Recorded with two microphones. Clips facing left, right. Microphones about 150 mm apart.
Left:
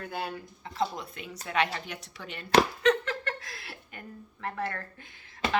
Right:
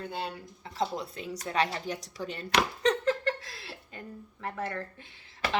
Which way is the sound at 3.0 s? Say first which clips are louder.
Right 6 dB; 30° right (ahead or behind).